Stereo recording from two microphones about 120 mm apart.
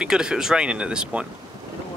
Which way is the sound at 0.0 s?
5° right (ahead or behind).